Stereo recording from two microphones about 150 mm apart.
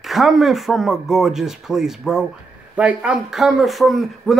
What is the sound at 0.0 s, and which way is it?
Speech, centre (ahead or behind).